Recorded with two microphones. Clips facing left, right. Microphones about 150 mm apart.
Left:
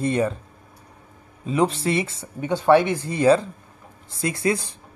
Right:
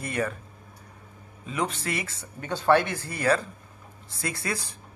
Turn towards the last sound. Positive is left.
turn(degrees=20)  # may be behind; listen again after turning